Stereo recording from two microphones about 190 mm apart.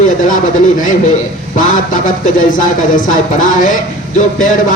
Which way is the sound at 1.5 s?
45° left (ahead or behind).